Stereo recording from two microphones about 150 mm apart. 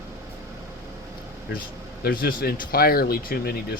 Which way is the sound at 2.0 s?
80° left.